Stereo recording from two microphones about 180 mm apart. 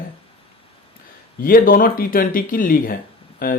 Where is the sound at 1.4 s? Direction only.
50° left (ahead or behind).